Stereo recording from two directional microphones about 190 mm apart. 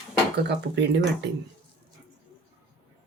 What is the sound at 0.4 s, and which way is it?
Speech, 65° right (ahead or behind).